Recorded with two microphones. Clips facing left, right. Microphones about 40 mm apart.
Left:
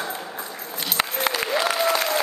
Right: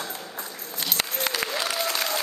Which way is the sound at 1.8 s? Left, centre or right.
Centre.